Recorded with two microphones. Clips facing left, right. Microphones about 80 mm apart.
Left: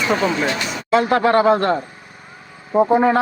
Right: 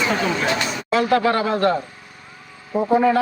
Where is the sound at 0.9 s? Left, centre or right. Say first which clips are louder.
Left 3 dB; left.